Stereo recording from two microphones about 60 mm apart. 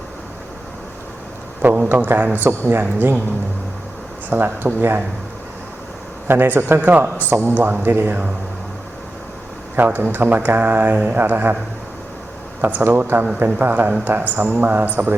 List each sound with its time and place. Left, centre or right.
1.6 s a man's voice: right
4.3 s speech: right
6.2 s speech: right
9.7 s speech: right
12.6 s a man's voice: right